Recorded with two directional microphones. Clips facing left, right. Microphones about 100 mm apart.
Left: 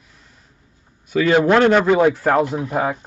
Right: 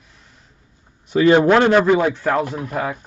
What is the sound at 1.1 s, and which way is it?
Speech, 25° right (ahead or behind).